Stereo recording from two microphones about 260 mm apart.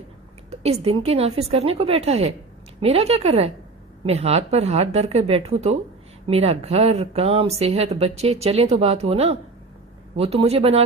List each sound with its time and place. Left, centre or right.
0.5 s a woman's voice: right